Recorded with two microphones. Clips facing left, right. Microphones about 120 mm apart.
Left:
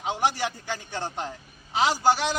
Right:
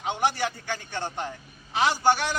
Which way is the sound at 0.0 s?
20° left (ahead or behind).